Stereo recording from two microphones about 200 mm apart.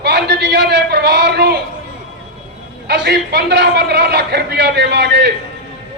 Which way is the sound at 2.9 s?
55° right (ahead or behind).